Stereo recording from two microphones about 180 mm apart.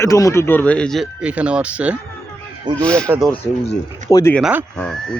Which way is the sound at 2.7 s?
5° left (ahead or behind).